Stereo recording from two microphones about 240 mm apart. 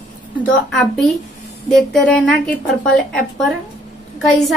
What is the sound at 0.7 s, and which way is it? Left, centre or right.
A woman's voice, centre.